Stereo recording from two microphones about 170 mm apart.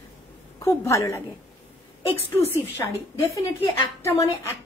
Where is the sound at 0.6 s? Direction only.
15° left (ahead or behind).